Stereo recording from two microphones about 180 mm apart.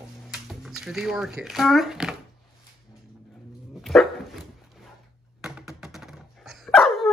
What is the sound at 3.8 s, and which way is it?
Dog, centre (ahead or behind).